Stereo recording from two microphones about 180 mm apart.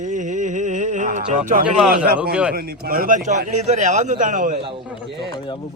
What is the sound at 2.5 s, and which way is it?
A man's voice, 55° right (ahead or behind).